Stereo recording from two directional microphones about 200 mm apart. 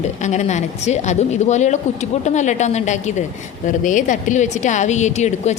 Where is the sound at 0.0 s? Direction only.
35° left (ahead or behind).